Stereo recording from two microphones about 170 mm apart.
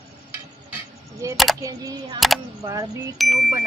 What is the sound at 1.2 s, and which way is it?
Speech, 20° right (ahead or behind).